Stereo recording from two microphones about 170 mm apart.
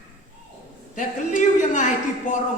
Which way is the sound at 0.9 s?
45° left (ahead or behind).